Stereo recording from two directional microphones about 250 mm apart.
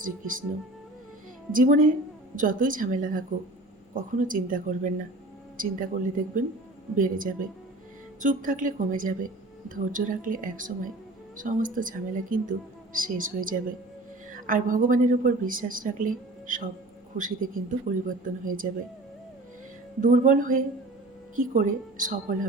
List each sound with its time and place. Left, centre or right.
1.5 s speech: right
20.0 s speech: right